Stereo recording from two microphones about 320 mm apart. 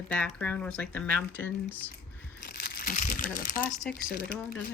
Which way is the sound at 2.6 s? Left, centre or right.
Left.